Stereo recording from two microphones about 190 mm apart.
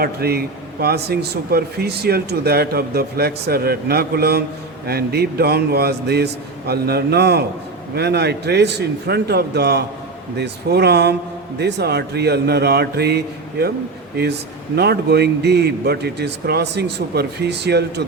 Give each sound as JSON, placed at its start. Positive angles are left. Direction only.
{"t": 0.0, "sound": "speech", "side_deg": -55}
{"t": 14.8, "sound": "speech", "side_deg": -60}